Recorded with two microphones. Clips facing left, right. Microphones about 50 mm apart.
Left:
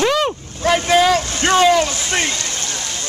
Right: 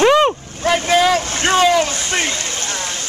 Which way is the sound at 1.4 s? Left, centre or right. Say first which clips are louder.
Left 1 dB; centre.